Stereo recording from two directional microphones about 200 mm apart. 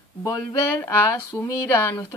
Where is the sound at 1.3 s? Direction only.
15° left (ahead or behind).